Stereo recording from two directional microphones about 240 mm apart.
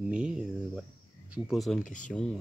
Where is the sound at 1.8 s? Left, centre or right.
Left.